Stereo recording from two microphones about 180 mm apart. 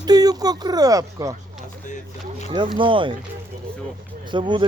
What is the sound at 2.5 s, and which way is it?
Speech, 25° right (ahead or behind).